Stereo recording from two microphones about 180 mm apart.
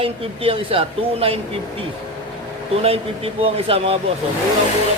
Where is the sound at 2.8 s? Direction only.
35° right (ahead or behind).